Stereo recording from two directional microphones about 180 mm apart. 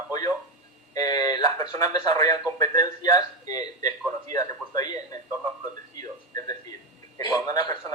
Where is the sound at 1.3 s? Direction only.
20° left (ahead or behind).